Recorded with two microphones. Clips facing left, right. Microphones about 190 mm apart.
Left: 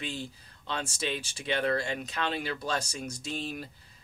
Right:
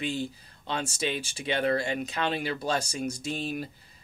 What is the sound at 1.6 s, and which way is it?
Speech, 15° right (ahead or behind).